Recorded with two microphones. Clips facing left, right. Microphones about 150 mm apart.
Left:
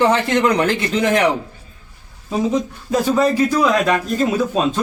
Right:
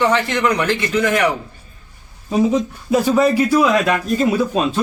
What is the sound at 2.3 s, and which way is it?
A man's voice, 10° right (ahead or behind).